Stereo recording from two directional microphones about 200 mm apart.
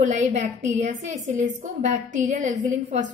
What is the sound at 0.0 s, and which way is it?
A woman's voice, 35° right (ahead or behind).